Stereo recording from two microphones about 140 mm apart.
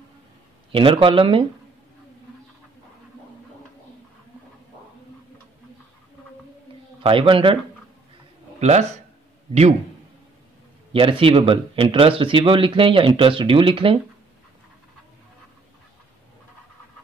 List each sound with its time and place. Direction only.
0.7 s speech: 40° right (ahead or behind)
7.0 s speech: 40° right (ahead or behind)
8.5 s a man's voice: 50° right (ahead or behind)
10.9 s speech: 40° right (ahead or behind)